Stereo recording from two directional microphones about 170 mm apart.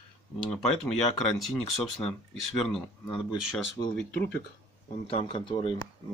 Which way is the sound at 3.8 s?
35° left (ahead or behind).